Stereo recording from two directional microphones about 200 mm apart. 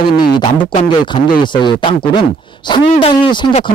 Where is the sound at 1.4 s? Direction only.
25° left (ahead or behind).